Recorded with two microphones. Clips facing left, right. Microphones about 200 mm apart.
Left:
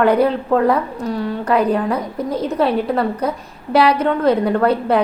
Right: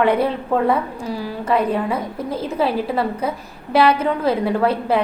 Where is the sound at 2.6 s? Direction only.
Centre (ahead or behind).